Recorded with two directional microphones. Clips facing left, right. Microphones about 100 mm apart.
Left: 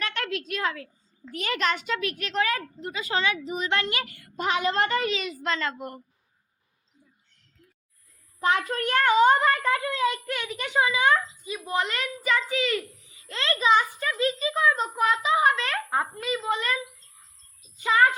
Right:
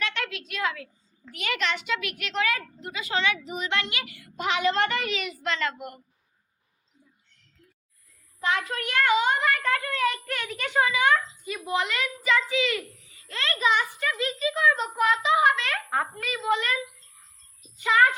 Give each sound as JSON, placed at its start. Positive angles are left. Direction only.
{"t": 0.0, "sound": "a woman's voice", "side_deg": 40}
{"t": 8.4, "sound": "a woman's voice", "side_deg": 40}
{"t": 9.6, "sound": "a child's voice", "side_deg": 20}
{"t": 10.2, "sound": "a child's voice", "side_deg": 10}
{"t": 10.8, "sound": "a child's voice", "side_deg": 25}
{"t": 13.2, "sound": "a child's voice", "side_deg": 25}